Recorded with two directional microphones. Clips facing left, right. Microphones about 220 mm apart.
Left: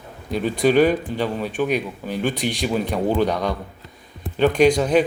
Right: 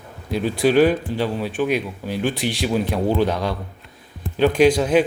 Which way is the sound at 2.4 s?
45° left (ahead or behind).